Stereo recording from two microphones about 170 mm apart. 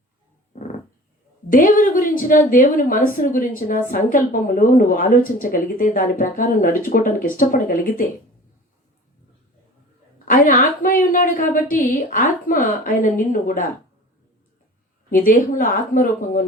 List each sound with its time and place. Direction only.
1.5 s a woman's voice: 50° left (ahead or behind)
10.2 s a woman's voice: 55° left (ahead or behind)
15.1 s speech: 55° left (ahead or behind)